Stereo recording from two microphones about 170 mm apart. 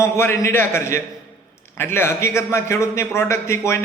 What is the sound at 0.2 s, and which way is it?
A man's voice, 15° left (ahead or behind).